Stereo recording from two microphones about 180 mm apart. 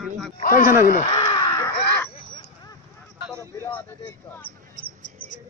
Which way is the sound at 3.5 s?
10° left (ahead or behind).